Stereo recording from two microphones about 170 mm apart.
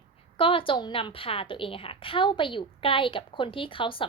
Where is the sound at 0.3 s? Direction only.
30° left (ahead or behind).